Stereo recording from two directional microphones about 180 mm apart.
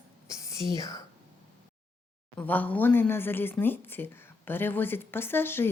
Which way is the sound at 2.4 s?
10° left (ahead or behind).